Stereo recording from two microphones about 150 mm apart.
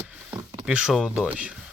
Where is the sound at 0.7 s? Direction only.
5° right (ahead or behind).